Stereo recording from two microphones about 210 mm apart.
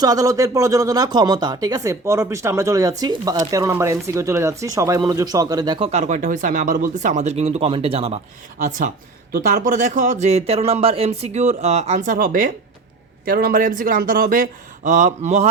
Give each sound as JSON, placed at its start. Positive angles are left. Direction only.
{"t": 0.0, "sound": "speech", "side_deg": -15}
{"t": 9.3, "sound": "speech", "side_deg": -40}